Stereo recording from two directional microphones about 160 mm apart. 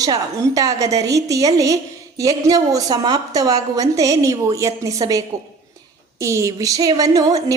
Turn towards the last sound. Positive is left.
turn(degrees=-25)  # may be behind; listen again after turning